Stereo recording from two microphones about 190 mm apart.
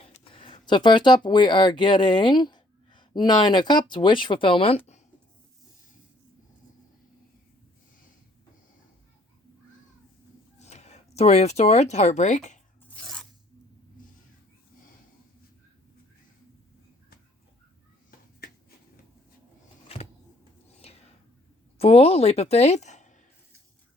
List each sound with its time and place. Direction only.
0.0 s speech: 30° left (ahead or behind)
10.6 s speech: 35° left (ahead or behind)
12.9 s filing: 5° left (ahead or behind)
19.9 s vehicle: 30° left (ahead or behind)
20.8 s a sound: 35° left (ahead or behind)
21.8 s a woman's voice: 30° left (ahead or behind)